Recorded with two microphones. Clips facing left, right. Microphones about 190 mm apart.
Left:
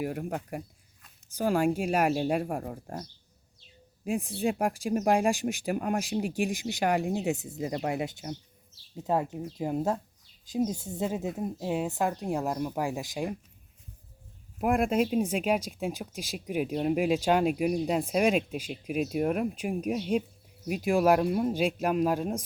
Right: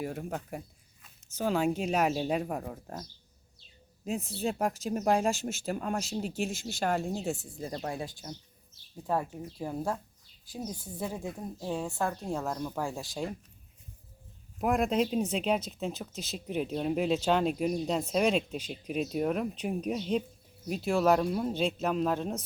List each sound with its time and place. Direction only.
0.0 s speech: 10° left (ahead or behind)
4.0 s speech: 10° left (ahead or behind)
7.7 s speech: 70° left (ahead or behind)
9.0 s speech: 20° left (ahead or behind)
14.6 s speech: 10° left (ahead or behind)